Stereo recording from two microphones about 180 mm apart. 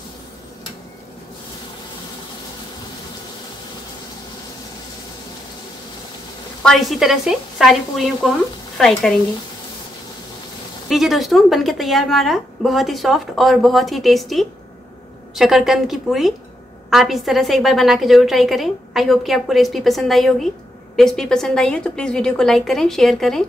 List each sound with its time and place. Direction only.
6.6 s a woman's voice: centre (ahead or behind)
10.9 s a woman's voice: centre (ahead or behind)